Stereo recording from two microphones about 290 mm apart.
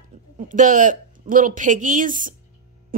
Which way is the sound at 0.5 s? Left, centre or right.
Right.